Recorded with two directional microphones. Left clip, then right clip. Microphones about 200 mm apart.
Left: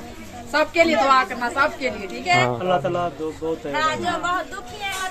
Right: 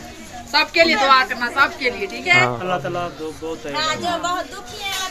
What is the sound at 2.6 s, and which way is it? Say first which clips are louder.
Speech: left 2 dB; 15° left (ahead or behind).